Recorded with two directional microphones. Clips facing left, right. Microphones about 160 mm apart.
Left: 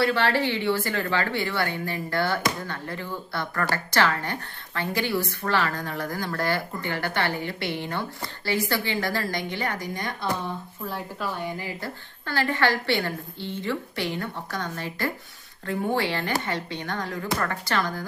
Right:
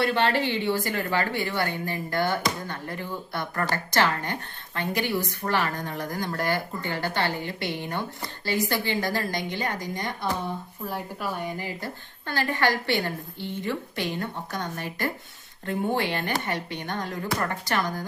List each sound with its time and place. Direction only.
0.0 s speech: 20° right (ahead or behind)